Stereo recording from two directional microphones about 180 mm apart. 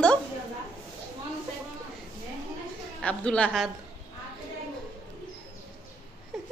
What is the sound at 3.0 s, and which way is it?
Speech, 5° left (ahead or behind).